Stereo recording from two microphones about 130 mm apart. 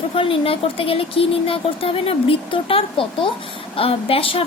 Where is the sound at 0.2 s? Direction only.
45° left (ahead or behind).